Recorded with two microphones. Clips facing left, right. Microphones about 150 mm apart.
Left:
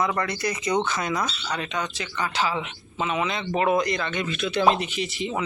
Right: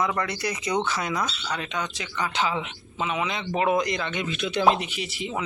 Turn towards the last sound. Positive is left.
turn(degrees=-10)  # may be behind; listen again after turning